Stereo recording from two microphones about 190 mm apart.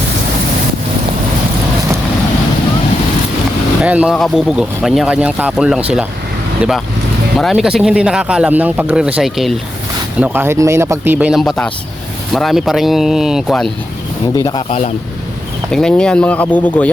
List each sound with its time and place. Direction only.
3.8 s speech: 5° right (ahead or behind)
14.3 s speech: 20° left (ahead or behind)
15.7 s speech: 5° left (ahead or behind)